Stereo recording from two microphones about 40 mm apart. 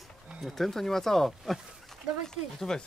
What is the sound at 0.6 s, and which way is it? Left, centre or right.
Speech, centre.